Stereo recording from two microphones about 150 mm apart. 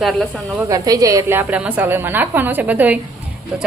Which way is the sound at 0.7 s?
20° right (ahead or behind).